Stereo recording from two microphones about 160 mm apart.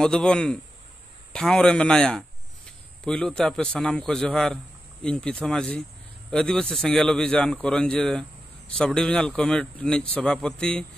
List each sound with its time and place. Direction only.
0.0 s a man's voice: 5° left (ahead or behind)